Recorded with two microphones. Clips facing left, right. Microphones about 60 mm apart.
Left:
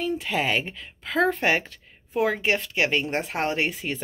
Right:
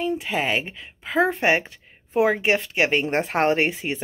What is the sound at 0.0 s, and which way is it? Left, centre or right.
Speech, centre.